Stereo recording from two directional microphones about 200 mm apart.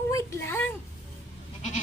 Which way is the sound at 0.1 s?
15° left (ahead or behind).